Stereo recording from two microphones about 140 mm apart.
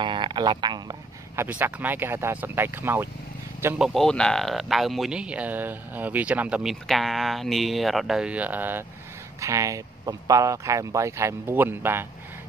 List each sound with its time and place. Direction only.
0.0 s a sound: 35° right (ahead or behind)
1.3 s speech: 15° right (ahead or behind)
3.7 s a man's voice: centre (ahead or behind)